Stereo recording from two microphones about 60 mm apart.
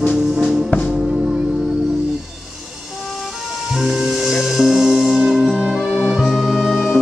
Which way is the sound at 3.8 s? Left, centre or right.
Centre.